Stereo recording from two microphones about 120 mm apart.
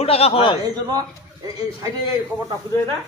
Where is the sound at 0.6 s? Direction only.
35° right (ahead or behind).